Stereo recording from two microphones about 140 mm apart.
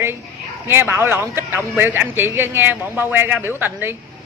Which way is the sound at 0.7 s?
15° right (ahead or behind).